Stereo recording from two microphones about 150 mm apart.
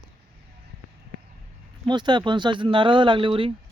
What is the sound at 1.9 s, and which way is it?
Speech, 30° right (ahead or behind).